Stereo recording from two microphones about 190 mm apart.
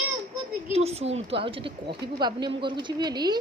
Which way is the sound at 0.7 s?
35° right (ahead or behind).